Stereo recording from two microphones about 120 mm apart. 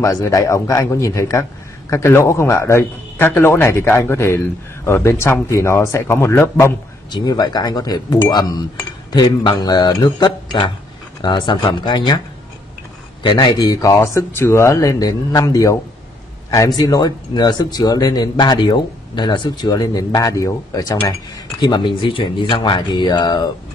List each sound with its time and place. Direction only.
0.0 s speech: 25° left (ahead or behind)
7.1 s speech: 35° left (ahead or behind)
13.2 s speech: 40° left (ahead or behind)